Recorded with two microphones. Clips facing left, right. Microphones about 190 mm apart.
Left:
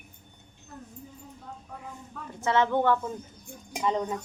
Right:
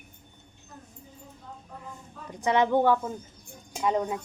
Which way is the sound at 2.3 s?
15° right (ahead or behind).